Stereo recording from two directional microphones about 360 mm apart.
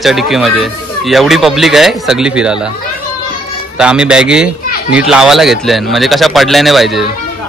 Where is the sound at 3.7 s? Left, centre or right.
Centre.